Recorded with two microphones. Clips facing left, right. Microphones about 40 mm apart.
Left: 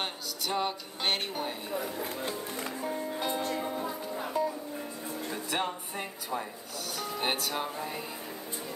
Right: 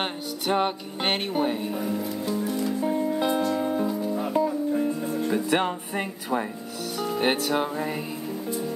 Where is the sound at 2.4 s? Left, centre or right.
Left.